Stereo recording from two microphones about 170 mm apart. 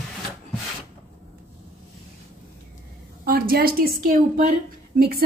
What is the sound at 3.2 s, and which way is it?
A woman's voice, 60° right (ahead or behind).